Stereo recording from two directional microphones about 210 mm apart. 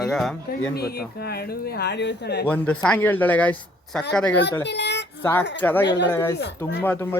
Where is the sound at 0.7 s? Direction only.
50° left (ahead or behind).